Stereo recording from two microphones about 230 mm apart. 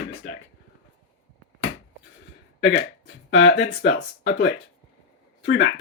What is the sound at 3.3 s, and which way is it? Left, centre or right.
Speech, left.